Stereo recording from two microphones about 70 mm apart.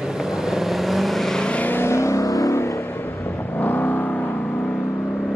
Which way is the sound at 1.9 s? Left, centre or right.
Left.